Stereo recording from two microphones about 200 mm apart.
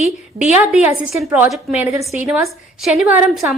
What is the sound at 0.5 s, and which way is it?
A woman's voice, 5° right (ahead or behind).